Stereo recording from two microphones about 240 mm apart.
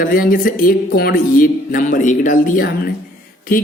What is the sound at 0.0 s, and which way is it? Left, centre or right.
Speech, left.